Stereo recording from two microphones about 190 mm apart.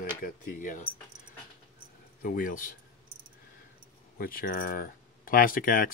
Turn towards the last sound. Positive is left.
turn(degrees=50)  # may be behind; listen again after turning